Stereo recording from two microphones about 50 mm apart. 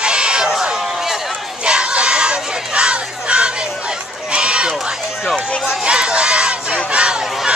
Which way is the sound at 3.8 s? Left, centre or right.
Centre.